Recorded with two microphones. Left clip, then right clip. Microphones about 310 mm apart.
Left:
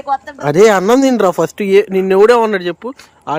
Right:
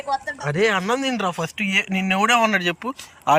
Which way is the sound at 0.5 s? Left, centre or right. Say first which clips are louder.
Left 12 dB; left.